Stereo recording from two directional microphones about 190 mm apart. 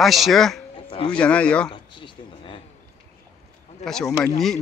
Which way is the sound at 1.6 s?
25° left (ahead or behind).